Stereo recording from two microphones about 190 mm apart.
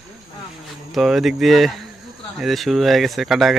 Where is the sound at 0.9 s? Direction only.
Centre (ahead or behind).